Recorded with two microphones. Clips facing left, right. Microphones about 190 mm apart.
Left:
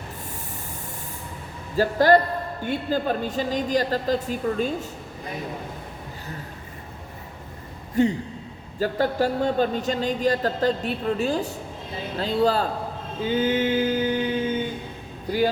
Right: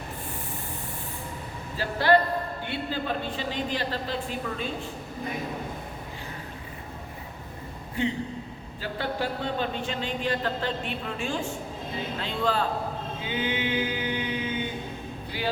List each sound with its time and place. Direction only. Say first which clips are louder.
1.7 s speech: left 5 dB; 40° left (ahead or behind)
8.0 s speech: left 7 dB; 40° left (ahead or behind)
13.2 s mantra: left 8 dB; 45° left (ahead or behind)